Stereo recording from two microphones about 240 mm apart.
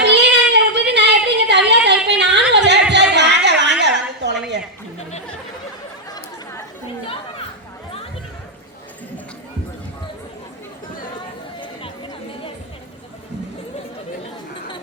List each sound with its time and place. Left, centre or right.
0.0 s a sound: right
6.1 s chatter: centre
11.6 s chatter: centre